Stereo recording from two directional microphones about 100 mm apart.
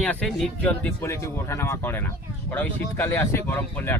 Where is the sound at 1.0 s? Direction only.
30° left (ahead or behind).